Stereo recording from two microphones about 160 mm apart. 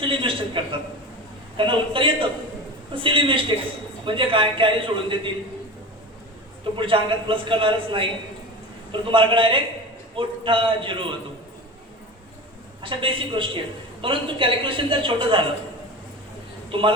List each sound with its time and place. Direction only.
0.0 s a man's voice: 30° right (ahead or behind)
6.7 s a woman's voice: 30° right (ahead or behind)
12.8 s a woman's voice: 35° right (ahead or behind)
16.7 s a woman's voice: 35° right (ahead or behind)